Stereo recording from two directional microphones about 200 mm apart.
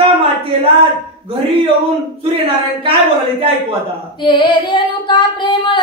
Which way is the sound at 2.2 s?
25° right (ahead or behind).